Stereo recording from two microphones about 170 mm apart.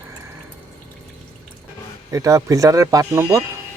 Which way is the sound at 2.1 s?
20° right (ahead or behind).